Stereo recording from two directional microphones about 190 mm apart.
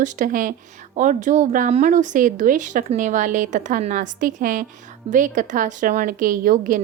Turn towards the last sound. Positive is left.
turn(degrees=-45)  # may be behind; listen again after turning